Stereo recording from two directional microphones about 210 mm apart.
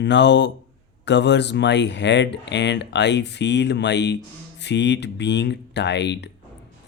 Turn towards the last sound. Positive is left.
turn(degrees=55)  # may be behind; listen again after turning